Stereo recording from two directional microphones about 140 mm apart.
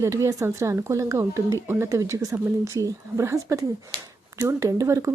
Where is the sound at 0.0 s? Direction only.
20° right (ahead or behind).